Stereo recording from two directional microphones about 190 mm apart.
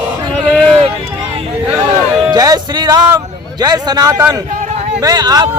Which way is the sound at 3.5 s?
20° right (ahead or behind).